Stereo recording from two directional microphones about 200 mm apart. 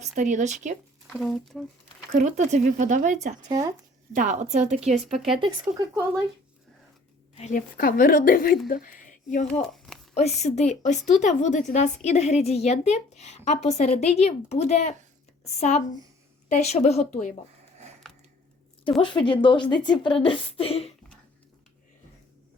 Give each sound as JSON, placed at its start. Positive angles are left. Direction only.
{"t": 0.2, "sound": "speech", "side_deg": -40}
{"t": 1.0, "sound": "speech", "side_deg": 0}
{"t": 2.1, "sound": "speech", "side_deg": -35}
{"t": 3.5, "sound": "speech", "side_deg": -15}
{"t": 4.1, "sound": "speech", "side_deg": -40}
{"t": 5.0, "sound": "speech", "side_deg": 0}
{"t": 5.4, "sound": "speech", "side_deg": -20}
{"t": 7.3, "sound": "speech", "side_deg": 40}
{"t": 9.5, "sound": "a sound", "side_deg": 0}
{"t": 10.2, "sound": "a woman's voice", "side_deg": 35}
{"t": 18.0, "sound": "a sound", "side_deg": 5}
{"t": 19.0, "sound": "a woman's voice", "side_deg": 25}